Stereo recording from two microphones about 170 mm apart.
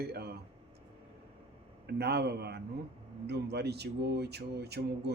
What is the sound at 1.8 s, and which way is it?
Speech, 75° right (ahead or behind).